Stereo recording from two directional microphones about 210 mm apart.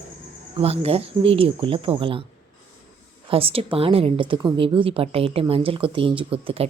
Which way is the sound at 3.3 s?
25° right (ahead or behind).